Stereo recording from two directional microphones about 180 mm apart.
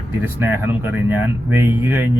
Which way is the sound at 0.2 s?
10° right (ahead or behind).